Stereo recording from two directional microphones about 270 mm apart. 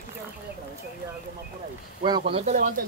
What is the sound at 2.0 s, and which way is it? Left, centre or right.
Speech, centre.